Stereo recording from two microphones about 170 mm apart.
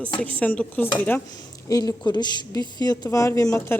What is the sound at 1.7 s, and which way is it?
Speech, 20° left (ahead or behind).